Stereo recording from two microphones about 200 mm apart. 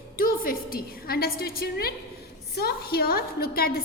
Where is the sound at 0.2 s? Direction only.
45° left (ahead or behind).